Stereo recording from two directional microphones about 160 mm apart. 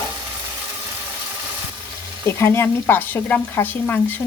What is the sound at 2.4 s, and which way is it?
Speech, 15° left (ahead or behind).